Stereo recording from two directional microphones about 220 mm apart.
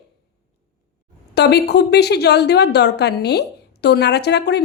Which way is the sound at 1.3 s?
50° left (ahead or behind).